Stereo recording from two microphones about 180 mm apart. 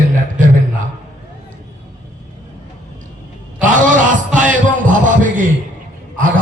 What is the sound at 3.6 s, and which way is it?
Music, 45° right (ahead or behind).